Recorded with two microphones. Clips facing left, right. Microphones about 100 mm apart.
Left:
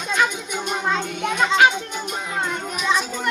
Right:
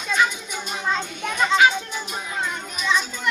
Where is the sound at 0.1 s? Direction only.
65° left (ahead or behind).